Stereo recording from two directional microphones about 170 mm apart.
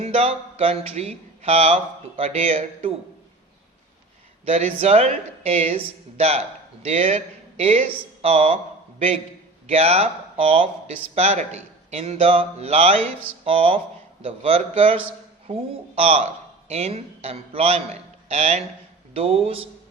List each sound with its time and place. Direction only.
0.0 s speech: 35° right (ahead or behind)
4.4 s speech: 35° right (ahead or behind)
9.6 s speech: 35° right (ahead or behind)